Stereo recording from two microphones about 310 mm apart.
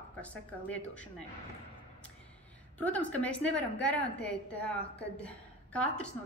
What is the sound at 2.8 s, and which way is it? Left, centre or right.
A woman's voice, centre.